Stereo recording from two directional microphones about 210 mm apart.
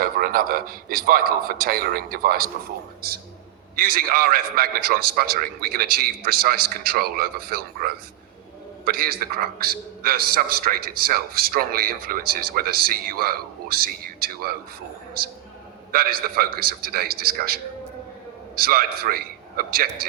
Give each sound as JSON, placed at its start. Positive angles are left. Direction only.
{"t": 0.0, "sound": "a man's voice", "side_deg": -45}
{"t": 15.9, "sound": "a man's voice", "side_deg": -45}